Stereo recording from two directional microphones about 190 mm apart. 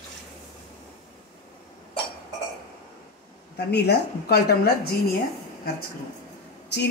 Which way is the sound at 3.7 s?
60° left (ahead or behind).